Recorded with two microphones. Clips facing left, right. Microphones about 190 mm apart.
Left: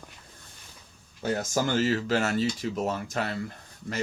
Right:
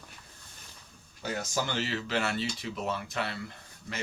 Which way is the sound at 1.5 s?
45° left (ahead or behind).